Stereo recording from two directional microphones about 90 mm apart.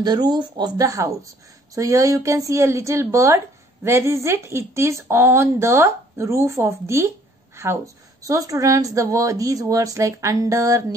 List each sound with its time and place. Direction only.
0.0 s speech: 55° right (ahead or behind)
0.8 s a woman's voice: 35° right (ahead or behind)